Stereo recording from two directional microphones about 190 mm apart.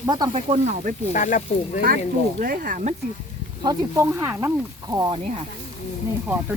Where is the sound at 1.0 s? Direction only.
40° left (ahead or behind).